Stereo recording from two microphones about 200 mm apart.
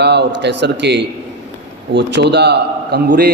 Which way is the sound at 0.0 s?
55° right (ahead or behind).